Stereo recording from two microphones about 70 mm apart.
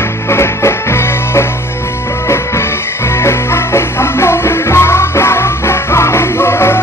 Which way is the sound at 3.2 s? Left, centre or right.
Left.